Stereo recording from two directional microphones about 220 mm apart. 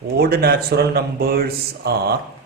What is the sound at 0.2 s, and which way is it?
A man's voice, 45° right (ahead or behind).